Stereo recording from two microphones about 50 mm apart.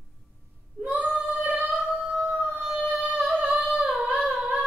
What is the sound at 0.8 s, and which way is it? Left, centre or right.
Child singing, right.